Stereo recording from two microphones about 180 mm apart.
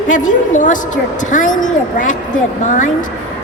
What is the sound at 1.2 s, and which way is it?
Speech, 45° left (ahead or behind).